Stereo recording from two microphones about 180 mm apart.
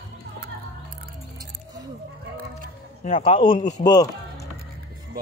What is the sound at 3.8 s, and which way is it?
Music, 20° left (ahead or behind).